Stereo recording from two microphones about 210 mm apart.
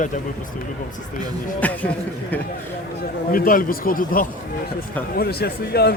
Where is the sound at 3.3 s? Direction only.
40° left (ahead or behind).